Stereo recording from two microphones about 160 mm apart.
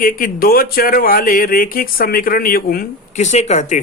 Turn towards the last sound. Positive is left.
turn(degrees=45)  # may be behind; listen again after turning